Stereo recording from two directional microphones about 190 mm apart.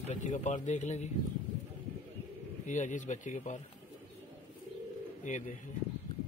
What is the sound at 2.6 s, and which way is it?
A man's voice, 40° left (ahead or behind).